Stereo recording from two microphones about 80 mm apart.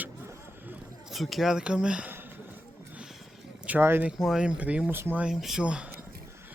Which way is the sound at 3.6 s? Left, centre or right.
Right.